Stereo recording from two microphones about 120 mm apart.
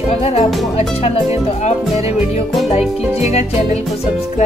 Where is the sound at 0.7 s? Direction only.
55° left (ahead or behind).